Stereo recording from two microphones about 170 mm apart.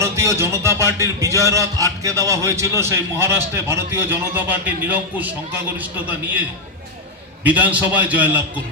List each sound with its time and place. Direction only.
0.0 s a man's voice: 15° right (ahead or behind)
7.4 s a man's voice: 10° right (ahead or behind)